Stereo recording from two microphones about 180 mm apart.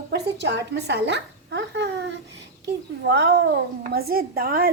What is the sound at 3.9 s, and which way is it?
Speech, 55° right (ahead or behind).